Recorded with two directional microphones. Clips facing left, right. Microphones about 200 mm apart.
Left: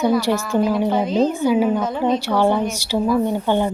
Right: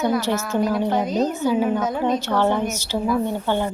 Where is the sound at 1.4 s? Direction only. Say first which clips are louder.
Left 3 dB; 10° left (ahead or behind).